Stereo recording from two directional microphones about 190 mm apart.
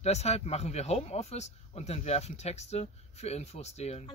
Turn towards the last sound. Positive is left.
turn(degrees=35)  # may be behind; listen again after turning